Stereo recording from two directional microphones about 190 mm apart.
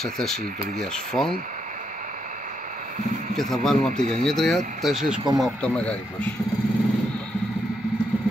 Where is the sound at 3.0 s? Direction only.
45° right (ahead or behind).